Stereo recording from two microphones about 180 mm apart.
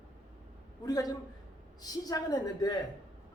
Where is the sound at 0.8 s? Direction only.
20° left (ahead or behind).